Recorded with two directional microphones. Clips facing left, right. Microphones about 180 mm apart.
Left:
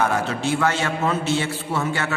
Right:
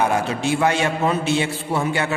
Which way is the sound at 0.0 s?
15° right (ahead or behind).